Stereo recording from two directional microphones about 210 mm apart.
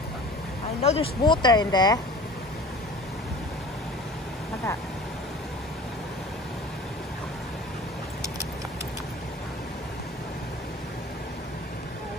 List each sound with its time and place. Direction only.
0.8 s speech: 25° left (ahead or behind)